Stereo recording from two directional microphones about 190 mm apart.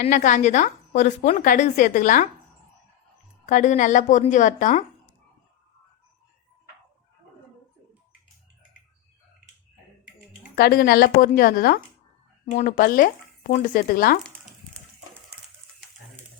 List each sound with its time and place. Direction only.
0.0 s a woman's voice: 45° left (ahead or behind)
3.4 s speech: 40° left (ahead or behind)
10.5 s speech: 50° left (ahead or behind)
12.5 s speech: 40° left (ahead or behind)